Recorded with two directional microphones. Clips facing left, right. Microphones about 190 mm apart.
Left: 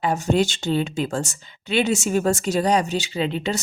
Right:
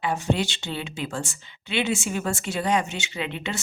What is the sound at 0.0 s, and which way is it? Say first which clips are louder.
Speech: left 5 dB; 45° left (ahead or behind).